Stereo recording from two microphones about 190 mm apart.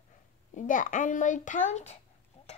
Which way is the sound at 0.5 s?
45° left (ahead or behind).